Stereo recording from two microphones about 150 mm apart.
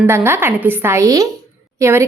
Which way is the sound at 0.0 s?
15° right (ahead or behind).